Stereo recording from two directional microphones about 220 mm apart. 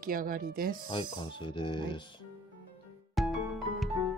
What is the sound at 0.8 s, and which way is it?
Speech, 20° left (ahead or behind).